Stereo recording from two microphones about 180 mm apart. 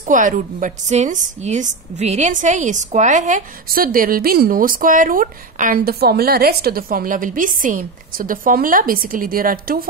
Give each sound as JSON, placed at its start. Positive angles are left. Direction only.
{"t": 0.0, "sound": "a woman's voice", "side_deg": -45}